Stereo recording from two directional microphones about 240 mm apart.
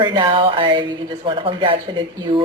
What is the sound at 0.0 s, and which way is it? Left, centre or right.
A woman's voice, centre.